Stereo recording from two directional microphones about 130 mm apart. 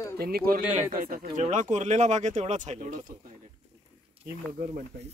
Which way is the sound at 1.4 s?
70° right (ahead or behind).